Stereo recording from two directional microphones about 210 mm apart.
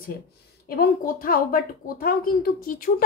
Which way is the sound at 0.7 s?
45° left (ahead or behind).